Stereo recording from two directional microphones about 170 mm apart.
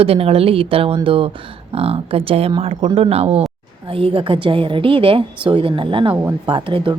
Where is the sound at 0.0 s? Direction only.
35° right (ahead or behind).